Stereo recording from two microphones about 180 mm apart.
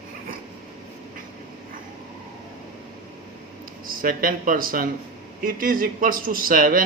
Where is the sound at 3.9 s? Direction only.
50° right (ahead or behind).